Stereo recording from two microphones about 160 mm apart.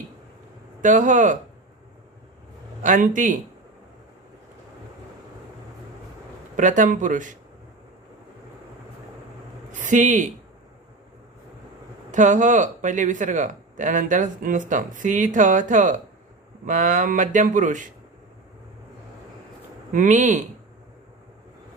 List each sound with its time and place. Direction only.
0.8 s speech: 55° right (ahead or behind)
2.8 s a man's voice: 55° right (ahead or behind)
6.6 s speech: 55° right (ahead or behind)
9.7 s speech: 50° right (ahead or behind)
12.1 s speech: 50° right (ahead or behind)
19.9 s speech: 55° right (ahead or behind)